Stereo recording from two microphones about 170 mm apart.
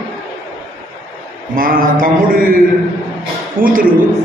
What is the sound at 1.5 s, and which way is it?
Speech, 55° right (ahead or behind).